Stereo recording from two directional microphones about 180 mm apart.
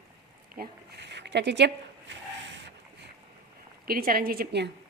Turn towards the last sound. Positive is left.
turn(degrees=-60)  # may be behind; listen again after turning